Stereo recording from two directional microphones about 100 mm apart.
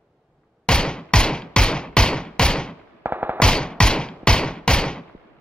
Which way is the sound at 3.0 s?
20° right (ahead or behind).